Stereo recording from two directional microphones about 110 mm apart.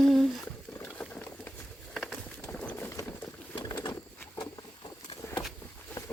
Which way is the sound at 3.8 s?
30° left (ahead or behind).